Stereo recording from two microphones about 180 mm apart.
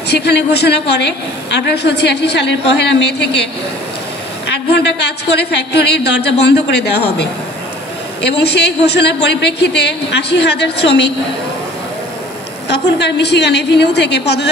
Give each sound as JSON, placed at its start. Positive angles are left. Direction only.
{"t": 0.1, "sound": "a woman's voice", "side_deg": 70}
{"t": 4.6, "sound": "a woman's voice", "side_deg": 70}
{"t": 12.6, "sound": "a woman's voice", "side_deg": 70}